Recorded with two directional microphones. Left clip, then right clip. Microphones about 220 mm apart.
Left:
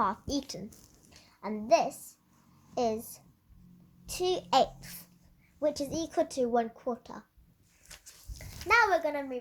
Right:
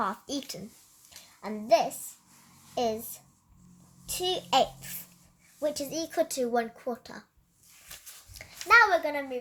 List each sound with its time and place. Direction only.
0.0 s speech: 10° right (ahead or behind)
7.9 s a sound: 10° right (ahead or behind)
8.5 s a child's voice: centre (ahead or behind)
9.0 s speech: 15° right (ahead or behind)